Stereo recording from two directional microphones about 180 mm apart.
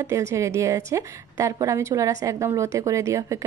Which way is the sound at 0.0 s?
15° right (ahead or behind).